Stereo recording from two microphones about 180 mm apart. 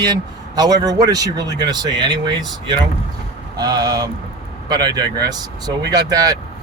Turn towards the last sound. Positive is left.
turn(degrees=-20)  # may be behind; listen again after turning